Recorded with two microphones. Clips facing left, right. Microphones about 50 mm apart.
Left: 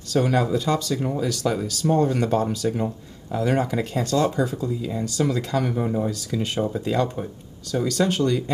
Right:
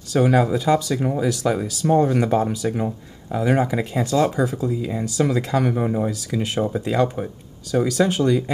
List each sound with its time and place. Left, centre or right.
0.1 s speech: centre
5.8 s speech: right
6.0 s speech: centre